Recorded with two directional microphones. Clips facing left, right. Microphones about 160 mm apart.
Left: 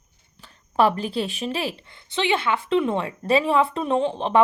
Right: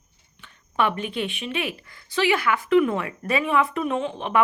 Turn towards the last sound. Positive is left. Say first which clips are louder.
# left 3 dB
turn(degrees=30)  # may be behind; listen again after turning